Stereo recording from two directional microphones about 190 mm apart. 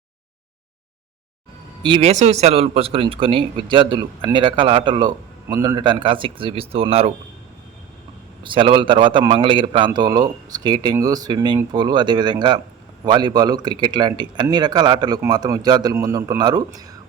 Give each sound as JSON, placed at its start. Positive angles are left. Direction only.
{"t": 1.8, "sound": "a man's voice", "side_deg": -30}
{"t": 8.4, "sound": "a man's voice", "side_deg": -25}